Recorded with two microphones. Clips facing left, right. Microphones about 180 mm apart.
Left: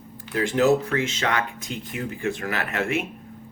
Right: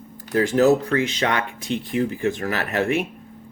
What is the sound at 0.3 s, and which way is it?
Speech, 40° right (ahead or behind).